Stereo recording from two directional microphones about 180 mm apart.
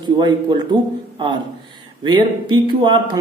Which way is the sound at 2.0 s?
25° right (ahead or behind).